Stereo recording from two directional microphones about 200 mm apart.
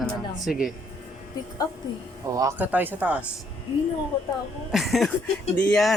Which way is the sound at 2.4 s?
10° right (ahead or behind).